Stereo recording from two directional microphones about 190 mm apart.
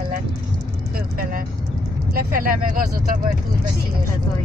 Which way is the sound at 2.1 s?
50° right (ahead or behind).